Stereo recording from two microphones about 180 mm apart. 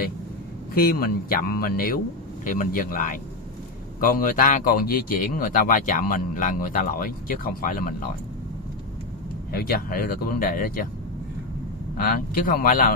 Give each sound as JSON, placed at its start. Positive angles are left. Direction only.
{"t": 0.7, "sound": "speech", "side_deg": 55}
{"t": 9.5, "sound": "speech", "side_deg": 60}
{"t": 12.0, "sound": "speech", "side_deg": 50}